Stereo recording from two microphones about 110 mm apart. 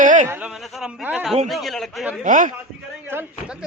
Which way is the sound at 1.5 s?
Centre (ahead or behind).